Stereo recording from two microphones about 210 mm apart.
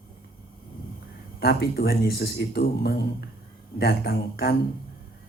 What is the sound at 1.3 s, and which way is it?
Speech, 50° left (ahead or behind).